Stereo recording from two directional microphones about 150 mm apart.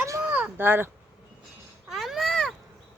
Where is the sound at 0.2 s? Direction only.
10° right (ahead or behind).